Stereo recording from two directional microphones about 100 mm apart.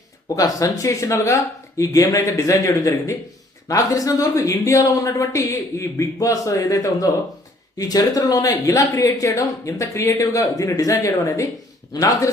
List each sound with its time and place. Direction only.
0.3 s speech: 35° left (ahead or behind)